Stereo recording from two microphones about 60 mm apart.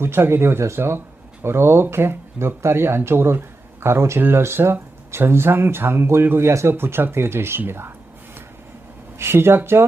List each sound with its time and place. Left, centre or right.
0.0 s speech: right
9.1 s speech: right